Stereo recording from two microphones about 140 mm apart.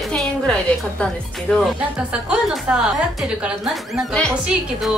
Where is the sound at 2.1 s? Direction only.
5° right (ahead or behind).